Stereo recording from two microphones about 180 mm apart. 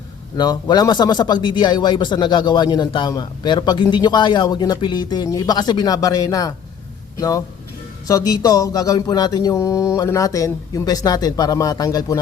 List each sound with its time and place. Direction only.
0.3 s speech: 25° left (ahead or behind)